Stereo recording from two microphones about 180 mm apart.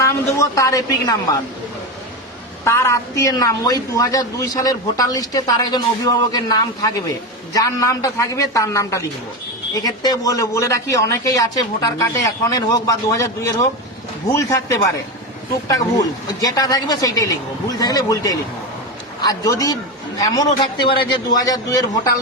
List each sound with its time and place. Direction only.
0.0 s a man's voice: 15° left (ahead or behind)
2.6 s a man's voice: 15° left (ahead or behind)